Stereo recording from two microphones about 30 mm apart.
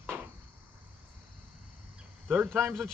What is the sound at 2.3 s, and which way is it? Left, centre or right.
Speech, right.